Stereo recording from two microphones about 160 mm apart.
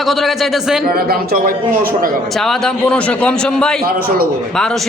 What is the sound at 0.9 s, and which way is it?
A man's voice, 75° right (ahead or behind).